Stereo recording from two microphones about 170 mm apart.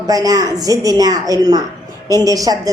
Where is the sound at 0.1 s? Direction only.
20° right (ahead or behind).